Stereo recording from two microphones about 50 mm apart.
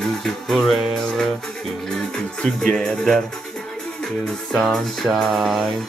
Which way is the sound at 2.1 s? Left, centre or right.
Centre.